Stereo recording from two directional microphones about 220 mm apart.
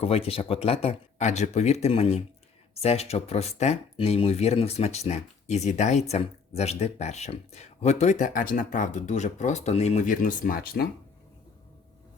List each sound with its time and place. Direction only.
0.0 s speech: 25° left (ahead or behind)